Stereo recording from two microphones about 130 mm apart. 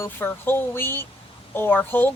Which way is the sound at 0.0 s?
15° left (ahead or behind).